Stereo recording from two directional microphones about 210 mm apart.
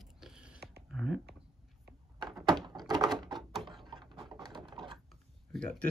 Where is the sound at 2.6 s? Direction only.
20° right (ahead or behind).